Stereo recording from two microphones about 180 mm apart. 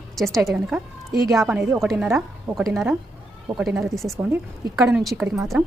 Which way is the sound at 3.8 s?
Centre (ahead or behind).